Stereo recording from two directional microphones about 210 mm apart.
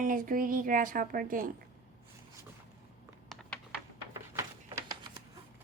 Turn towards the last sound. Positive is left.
turn(degrees=-15)  # may be behind; listen again after turning